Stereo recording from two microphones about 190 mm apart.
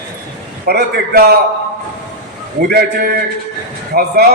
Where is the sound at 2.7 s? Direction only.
55° right (ahead or behind).